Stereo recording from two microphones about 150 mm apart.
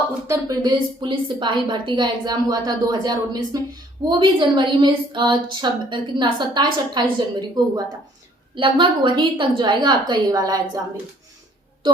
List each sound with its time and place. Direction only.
0.3 s a woman's voice: 25° right (ahead or behind)